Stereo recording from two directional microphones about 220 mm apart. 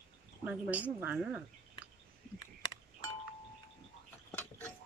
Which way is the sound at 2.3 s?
20° left (ahead or behind).